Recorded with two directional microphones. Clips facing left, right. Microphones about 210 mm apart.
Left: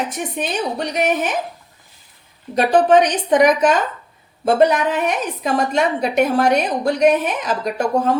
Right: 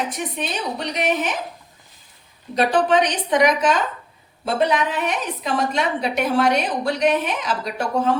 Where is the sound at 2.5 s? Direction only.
45° left (ahead or behind).